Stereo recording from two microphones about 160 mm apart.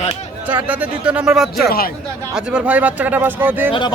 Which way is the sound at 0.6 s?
10° right (ahead or behind).